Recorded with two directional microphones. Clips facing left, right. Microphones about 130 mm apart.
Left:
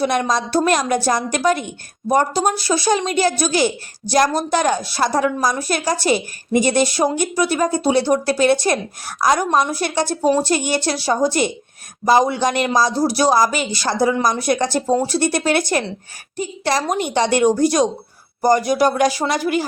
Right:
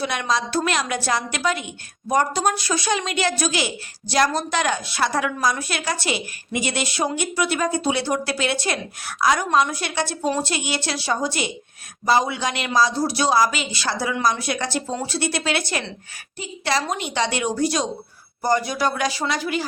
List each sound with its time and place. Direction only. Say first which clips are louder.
0.0 s speech: left 5 dB; 45° left (ahead or behind)
2.1 s a woman's voice: left 3 dB; 35° left (ahead or behind)